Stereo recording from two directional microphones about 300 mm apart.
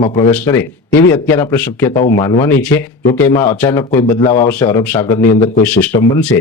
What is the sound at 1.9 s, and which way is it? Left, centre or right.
Speech, left.